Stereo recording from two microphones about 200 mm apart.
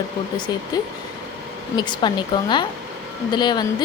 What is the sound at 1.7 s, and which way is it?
A woman's voice, 25° left (ahead or behind).